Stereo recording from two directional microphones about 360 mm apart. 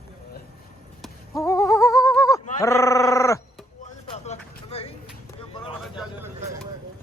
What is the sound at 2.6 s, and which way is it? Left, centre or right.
Groan, centre.